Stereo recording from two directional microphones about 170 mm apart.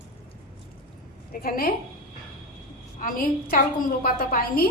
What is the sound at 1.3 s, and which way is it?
Speech, 60° left (ahead or behind).